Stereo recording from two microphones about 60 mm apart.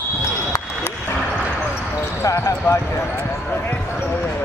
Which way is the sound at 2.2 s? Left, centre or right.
Left.